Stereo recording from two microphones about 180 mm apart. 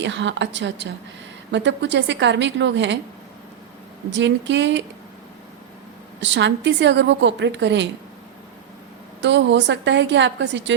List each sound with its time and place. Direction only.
0.0 s a woman's voice: 85° right
4.1 s a woman's voice: 85° right
6.1 s a woman's voice: 80° right
9.2 s a woman's voice: 80° right